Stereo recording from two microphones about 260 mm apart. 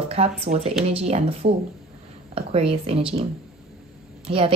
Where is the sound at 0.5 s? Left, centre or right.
Right.